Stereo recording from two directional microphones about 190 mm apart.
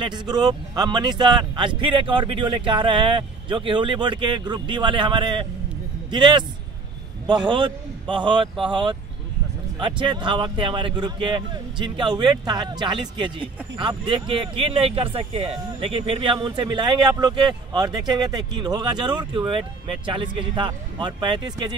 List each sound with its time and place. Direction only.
0.0 s a man's voice: 25° right (ahead or behind)
7.4 s a man's voice: 25° right (ahead or behind)